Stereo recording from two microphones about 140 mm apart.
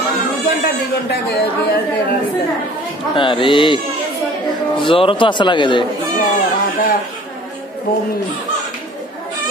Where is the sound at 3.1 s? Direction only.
35° left (ahead or behind).